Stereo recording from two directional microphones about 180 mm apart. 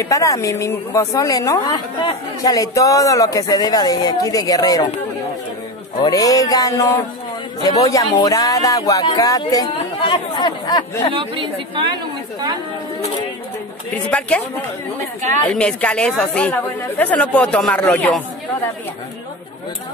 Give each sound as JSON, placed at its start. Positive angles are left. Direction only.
{"t": 0.0, "sound": "speech", "side_deg": 20}
{"t": 6.0, "sound": "speech", "side_deg": 20}
{"t": 11.1, "sound": "speech", "side_deg": -30}
{"t": 13.9, "sound": "speech", "side_deg": 5}
{"t": 15.4, "sound": "speech", "side_deg": 5}